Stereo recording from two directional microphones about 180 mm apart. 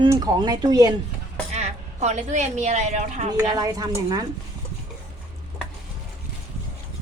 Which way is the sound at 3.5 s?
20° right (ahead or behind).